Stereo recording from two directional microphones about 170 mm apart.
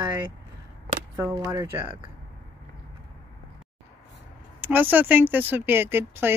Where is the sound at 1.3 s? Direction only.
20° right (ahead or behind).